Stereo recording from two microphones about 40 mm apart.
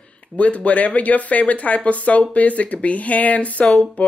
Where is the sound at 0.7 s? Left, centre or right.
Left.